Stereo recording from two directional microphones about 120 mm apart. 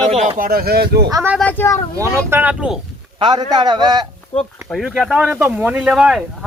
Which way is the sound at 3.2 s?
40° right (ahead or behind).